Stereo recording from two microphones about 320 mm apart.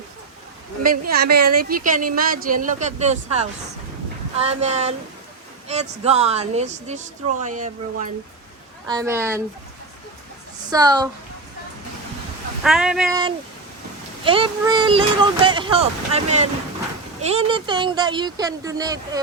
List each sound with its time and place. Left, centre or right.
0.8 s a woman's voice: right
8.9 s speech: centre
10.7 s speech: centre
12.6 s speech: centre
14.3 s speech: centre